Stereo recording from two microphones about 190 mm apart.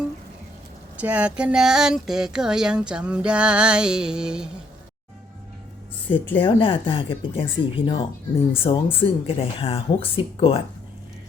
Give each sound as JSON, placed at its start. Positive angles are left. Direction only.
{"t": 0.9, "sound": "speech", "side_deg": -5}
{"t": 6.4, "sound": "speech", "side_deg": 25}